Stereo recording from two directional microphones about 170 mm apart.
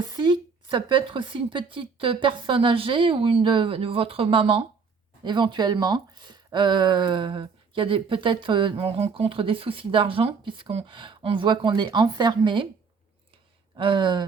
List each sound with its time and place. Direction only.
0.1 s speech: 25° right (ahead or behind)
13.7 s speech: 30° right (ahead or behind)